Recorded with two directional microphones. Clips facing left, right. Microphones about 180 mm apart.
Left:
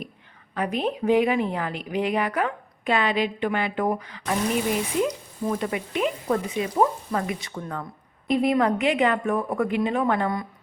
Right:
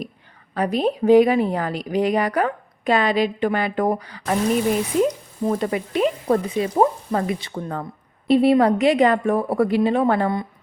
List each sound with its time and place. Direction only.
0.5 s a woman's voice: 35° right (ahead or behind)